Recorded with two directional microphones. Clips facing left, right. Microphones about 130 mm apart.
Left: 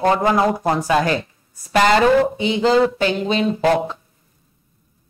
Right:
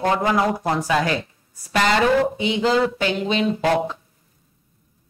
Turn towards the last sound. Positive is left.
turn(degrees=35)  # may be behind; listen again after turning